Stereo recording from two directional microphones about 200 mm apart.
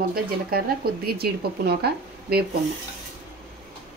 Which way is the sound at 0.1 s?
50° right (ahead or behind).